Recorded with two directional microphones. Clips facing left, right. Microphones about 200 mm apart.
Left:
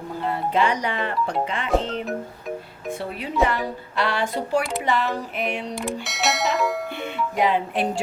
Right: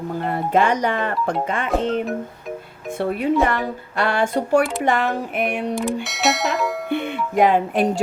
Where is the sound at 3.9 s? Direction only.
50° right (ahead or behind).